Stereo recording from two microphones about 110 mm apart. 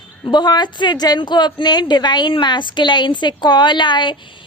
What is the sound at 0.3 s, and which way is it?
A woman's voice, 40° left (ahead or behind).